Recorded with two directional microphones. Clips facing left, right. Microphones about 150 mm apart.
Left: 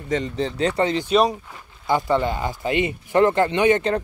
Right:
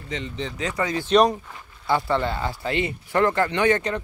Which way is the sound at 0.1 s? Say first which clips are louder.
Left 7 dB; 40° left (ahead or behind).